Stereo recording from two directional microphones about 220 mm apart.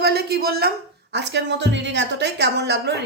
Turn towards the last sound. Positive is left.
turn(degrees=-50)  # may be behind; listen again after turning